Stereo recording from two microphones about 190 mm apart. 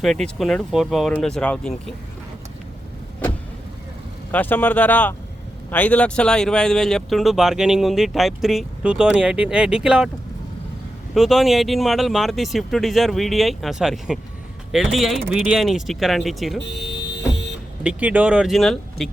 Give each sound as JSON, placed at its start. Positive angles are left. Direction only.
{"t": 0.0, "sound": "speech", "side_deg": 0}
{"t": 4.3, "sound": "speech", "side_deg": 10}
{"t": 11.1, "sound": "speech", "side_deg": 0}
{"t": 16.6, "sound": "vehicle", "side_deg": 65}
{"t": 17.8, "sound": "speech", "side_deg": -5}